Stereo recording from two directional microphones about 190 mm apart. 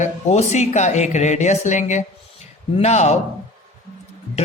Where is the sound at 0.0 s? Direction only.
35° left (ahead or behind).